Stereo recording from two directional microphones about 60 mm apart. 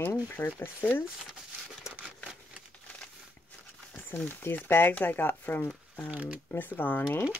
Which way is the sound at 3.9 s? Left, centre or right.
Left.